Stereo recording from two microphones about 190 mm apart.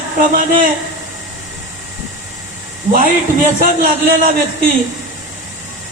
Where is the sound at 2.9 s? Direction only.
45° right (ahead or behind).